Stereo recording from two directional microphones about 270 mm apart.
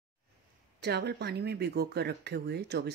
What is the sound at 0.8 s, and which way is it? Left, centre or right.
Speech, right.